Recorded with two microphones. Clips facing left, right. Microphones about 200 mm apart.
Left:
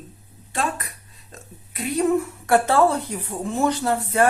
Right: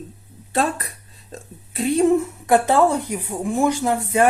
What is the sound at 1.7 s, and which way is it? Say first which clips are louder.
Speech: right 4 dB; 25° right (ahead or behind).